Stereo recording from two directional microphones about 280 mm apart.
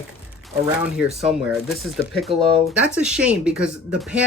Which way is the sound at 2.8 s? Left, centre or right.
Centre.